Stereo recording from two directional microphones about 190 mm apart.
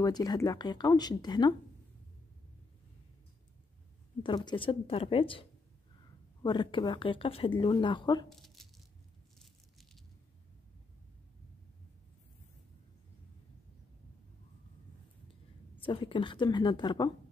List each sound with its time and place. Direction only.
0.0 s speech: 20° left (ahead or behind)
4.5 s speech: 25° left (ahead or behind)
8.3 s a sound: centre (ahead or behind)
15.8 s speech: 25° left (ahead or behind)